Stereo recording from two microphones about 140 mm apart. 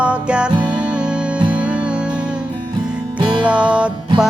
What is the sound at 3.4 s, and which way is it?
Music, 10° right (ahead or behind).